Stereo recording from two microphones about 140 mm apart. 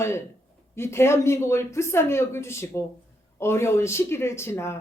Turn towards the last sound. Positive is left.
turn(degrees=20)  # may be behind; listen again after turning